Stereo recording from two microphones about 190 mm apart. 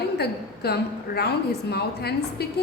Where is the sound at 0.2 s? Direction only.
55° left (ahead or behind).